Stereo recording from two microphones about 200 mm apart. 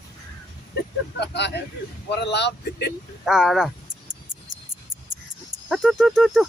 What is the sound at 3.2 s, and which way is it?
Speech, centre (ahead or behind).